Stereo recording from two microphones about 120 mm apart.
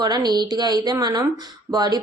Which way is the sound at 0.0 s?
35° right (ahead or behind).